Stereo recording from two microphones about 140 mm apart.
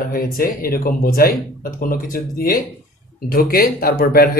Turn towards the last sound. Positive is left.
turn(degrees=90)